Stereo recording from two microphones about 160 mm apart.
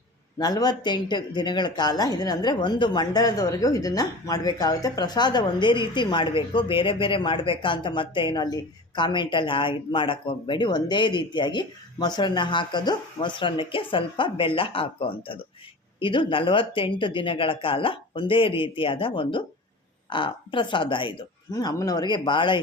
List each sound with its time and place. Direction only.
0.3 s speech: 25° left (ahead or behind)